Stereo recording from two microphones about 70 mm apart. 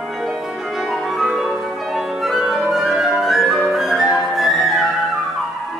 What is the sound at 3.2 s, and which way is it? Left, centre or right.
Flute, centre.